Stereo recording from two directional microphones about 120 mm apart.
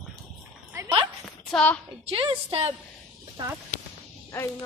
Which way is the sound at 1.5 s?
10° left (ahead or behind).